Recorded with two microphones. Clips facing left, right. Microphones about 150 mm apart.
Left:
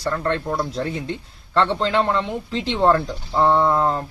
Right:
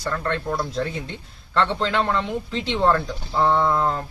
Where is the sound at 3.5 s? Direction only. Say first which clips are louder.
Left 2 dB; 15° left (ahead or behind).